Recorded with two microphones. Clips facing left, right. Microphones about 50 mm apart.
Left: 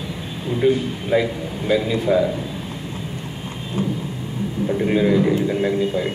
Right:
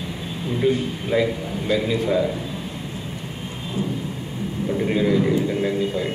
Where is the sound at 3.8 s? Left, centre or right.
Left.